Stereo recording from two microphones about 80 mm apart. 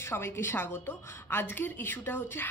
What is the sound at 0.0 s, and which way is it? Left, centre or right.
A woman's voice, left.